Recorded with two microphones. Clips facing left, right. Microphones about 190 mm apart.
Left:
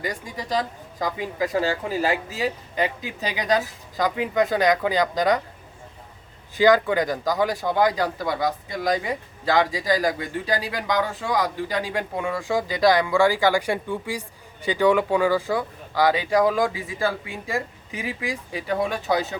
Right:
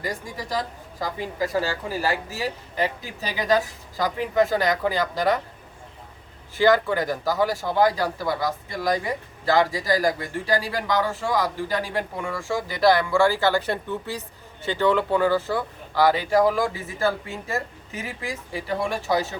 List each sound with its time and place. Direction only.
0.0 s speech: 15° left (ahead or behind)
6.6 s speech: 15° left (ahead or behind)